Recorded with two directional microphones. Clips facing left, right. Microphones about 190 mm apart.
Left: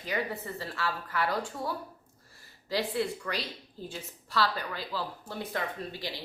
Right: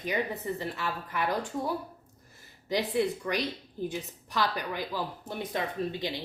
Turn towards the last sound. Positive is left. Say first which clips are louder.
# right 6 dB
turn(degrees=-20)  # may be behind; listen again after turning